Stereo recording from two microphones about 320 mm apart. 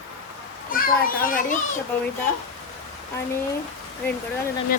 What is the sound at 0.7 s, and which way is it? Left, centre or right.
Speech, left.